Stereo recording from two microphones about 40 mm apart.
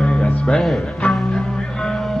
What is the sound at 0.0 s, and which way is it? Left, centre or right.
Music, left.